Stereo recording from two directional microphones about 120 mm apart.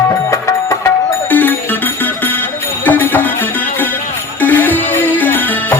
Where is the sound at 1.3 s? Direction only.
15° left (ahead or behind).